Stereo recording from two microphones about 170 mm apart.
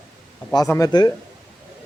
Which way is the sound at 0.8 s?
25° left (ahead or behind).